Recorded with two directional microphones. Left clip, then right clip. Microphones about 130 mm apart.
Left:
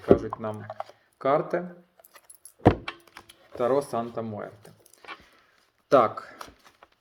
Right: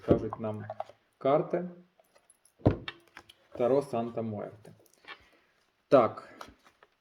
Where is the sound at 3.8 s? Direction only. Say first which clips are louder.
Left 3 dB; 30° right (ahead or behind).